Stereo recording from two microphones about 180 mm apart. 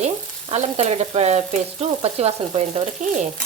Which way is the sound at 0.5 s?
35° right (ahead or behind).